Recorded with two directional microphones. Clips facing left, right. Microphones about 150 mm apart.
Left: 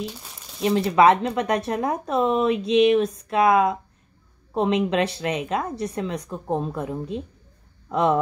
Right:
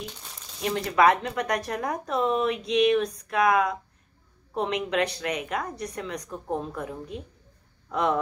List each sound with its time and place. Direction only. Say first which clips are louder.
0.6 s speech: left 5 dB; 25° left (ahead or behind)